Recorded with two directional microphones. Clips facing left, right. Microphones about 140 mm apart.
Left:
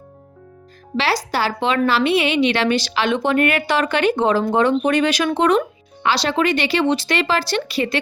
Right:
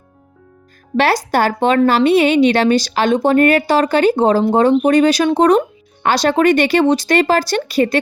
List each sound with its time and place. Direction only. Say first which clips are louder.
0.9 s a woman's voice: right 6 dB; 50° right (ahead or behind)